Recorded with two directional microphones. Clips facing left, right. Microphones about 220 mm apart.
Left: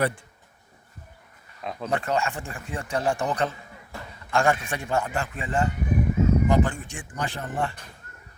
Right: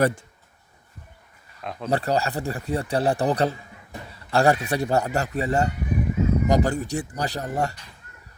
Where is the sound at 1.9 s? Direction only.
35° right (ahead or behind).